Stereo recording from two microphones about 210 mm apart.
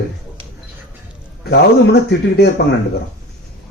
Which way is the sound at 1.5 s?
50° left (ahead or behind).